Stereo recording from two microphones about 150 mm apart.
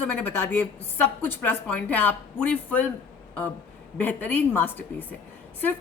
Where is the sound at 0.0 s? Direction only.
10° left (ahead or behind).